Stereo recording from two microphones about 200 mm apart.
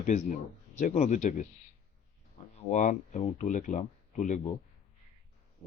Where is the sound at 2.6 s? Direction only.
35° left (ahead or behind).